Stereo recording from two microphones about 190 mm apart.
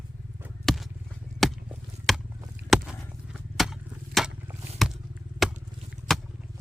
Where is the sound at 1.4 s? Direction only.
Centre (ahead or behind).